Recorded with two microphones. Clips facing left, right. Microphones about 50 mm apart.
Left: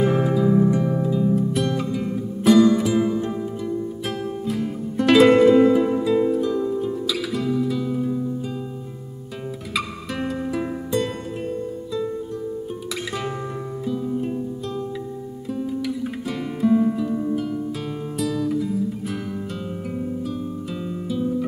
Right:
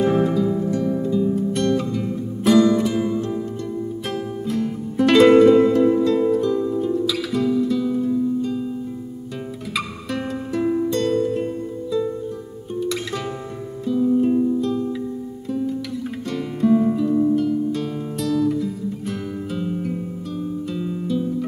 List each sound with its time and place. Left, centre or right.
0.0 s music: centre
1.0 s music: centre
3.2 s music: centre
4.0 s music: centre
9.8 s music: centre
13.8 s music: centre
15.4 s guitar: centre
17.3 s music: centre